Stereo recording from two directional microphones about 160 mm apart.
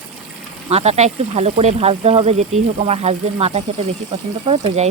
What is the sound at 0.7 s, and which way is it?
Speech, 40° right (ahead or behind).